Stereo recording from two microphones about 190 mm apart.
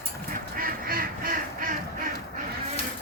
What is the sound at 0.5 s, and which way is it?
Goose, 50° right (ahead or behind).